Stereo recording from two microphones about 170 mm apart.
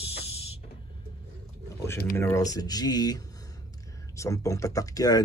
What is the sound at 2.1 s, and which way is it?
Speech, 15° left (ahead or behind).